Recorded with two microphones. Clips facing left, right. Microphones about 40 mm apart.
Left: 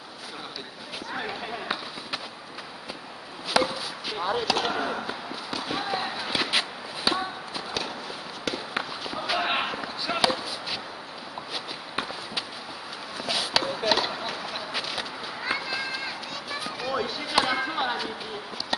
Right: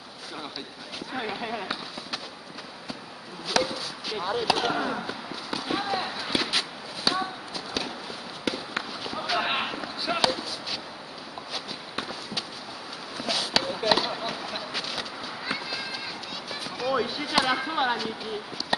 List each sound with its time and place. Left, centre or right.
1.1 s speech: centre
3.4 s chop: centre
4.7 s a sound: centre
7.1 s clip-clop: centre
8.5 s run: centre
9.0 s basketball bounce: centre
11.5 s walk: centre
13.2 s a sound: centre
14.1 s run: centre
16.9 s basketball bounce: centre
17.6 s speech: centre
18.7 s chopping: centre